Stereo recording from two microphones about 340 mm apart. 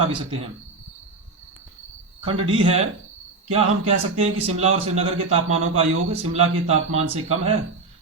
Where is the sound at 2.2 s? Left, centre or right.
Centre.